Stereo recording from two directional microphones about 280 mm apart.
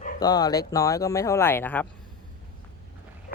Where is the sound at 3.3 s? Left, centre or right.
Left.